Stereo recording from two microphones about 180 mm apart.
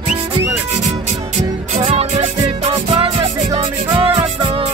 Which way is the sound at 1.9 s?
35° right (ahead or behind).